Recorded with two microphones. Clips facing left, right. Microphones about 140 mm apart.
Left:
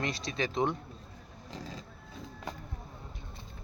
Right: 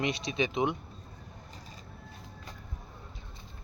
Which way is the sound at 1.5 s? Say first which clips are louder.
Left 12 dB; 90° left.